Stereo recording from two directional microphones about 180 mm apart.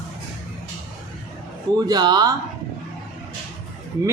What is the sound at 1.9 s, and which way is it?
Speech, 25° right (ahead or behind).